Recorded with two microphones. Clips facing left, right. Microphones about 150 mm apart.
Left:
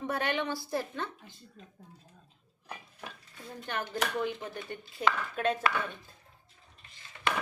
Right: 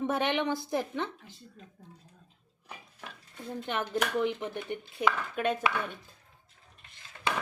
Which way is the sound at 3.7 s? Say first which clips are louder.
Right 2 dB; 20° right (ahead or behind).